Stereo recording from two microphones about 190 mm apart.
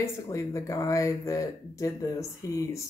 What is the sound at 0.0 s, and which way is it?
Speech, 15° left (ahead or behind).